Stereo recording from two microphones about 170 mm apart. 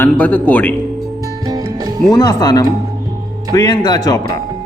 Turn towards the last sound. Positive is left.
turn(degrees=20)  # may be behind; listen again after turning